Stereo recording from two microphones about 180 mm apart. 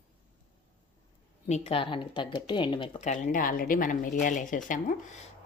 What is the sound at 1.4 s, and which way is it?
Speech, 35° left (ahead or behind).